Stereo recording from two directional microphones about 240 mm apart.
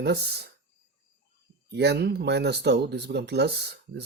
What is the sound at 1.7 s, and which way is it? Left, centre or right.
Speech, right.